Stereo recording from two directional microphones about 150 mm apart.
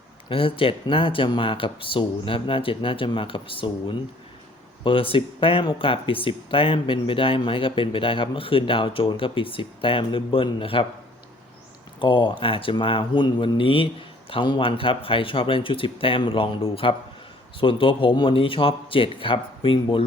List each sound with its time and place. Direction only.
0.3 s speech: 35° left (ahead or behind)
11.9 s speech: 30° left (ahead or behind)